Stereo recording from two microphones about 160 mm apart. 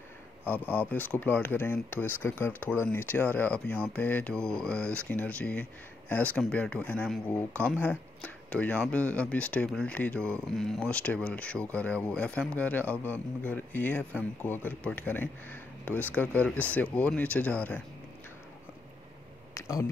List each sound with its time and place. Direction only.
0.5 s speech: 10° left (ahead or behind)
19.5 s speech: 20° left (ahead or behind)